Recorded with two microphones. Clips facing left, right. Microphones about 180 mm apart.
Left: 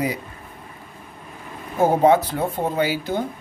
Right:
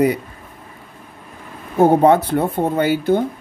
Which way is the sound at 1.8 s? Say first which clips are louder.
Right 4 dB; 60° right (ahead or behind).